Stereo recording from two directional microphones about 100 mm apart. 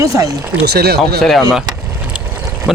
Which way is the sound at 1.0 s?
Centre (ahead or behind).